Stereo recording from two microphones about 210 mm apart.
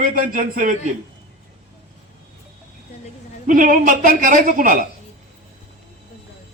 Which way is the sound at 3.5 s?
40° right (ahead or behind).